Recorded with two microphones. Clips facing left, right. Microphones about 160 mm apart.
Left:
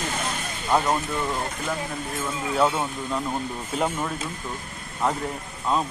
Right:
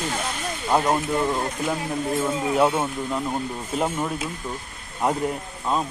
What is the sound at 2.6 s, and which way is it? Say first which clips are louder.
A man's voice: right 1 dB; 15° right (ahead or behind).